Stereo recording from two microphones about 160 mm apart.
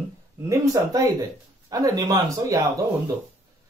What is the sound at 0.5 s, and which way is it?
Speech, 20° right (ahead or behind).